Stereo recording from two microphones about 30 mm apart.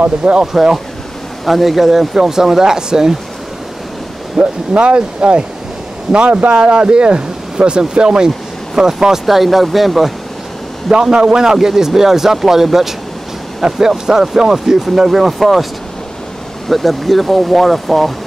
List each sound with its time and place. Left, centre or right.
0.2 s speech: right
0.5 s speech: centre
1.4 s speech: centre; by 3.2 s right
4.4 s speech: right
6.5 s a man's voice: right
9.2 s speech: centre
10.9 s a man's voice: right
15.0 s speech: centre
16.6 s speech: centre